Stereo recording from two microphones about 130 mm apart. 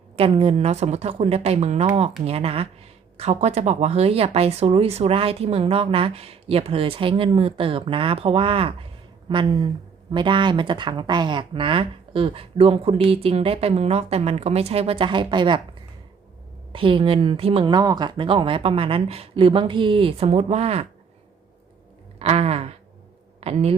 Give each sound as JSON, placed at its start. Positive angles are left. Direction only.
{"t": 0.2, "sound": "speech", "side_deg": -45}
{"t": 16.7, "sound": "speech", "side_deg": -40}
{"t": 22.2, "sound": "speech", "side_deg": -50}